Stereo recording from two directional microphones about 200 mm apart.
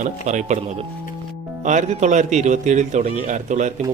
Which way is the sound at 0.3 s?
35° right (ahead or behind).